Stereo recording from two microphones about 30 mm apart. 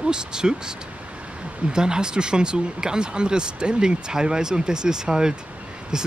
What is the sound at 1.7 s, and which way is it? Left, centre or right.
Speech, right.